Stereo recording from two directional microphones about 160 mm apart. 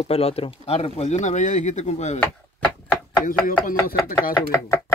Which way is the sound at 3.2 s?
60° left (ahead or behind).